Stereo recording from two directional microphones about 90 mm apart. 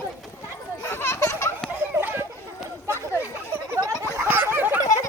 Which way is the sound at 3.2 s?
25° right (ahead or behind).